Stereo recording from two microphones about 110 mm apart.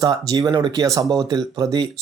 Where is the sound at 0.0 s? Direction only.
40° right (ahead or behind).